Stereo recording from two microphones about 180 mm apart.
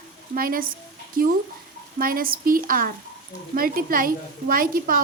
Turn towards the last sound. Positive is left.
turn(degrees=-50)  # may be behind; listen again after turning